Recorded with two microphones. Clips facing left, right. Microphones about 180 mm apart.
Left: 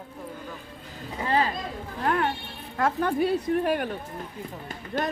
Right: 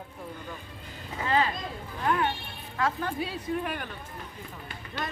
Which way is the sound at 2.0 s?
45° left (ahead or behind).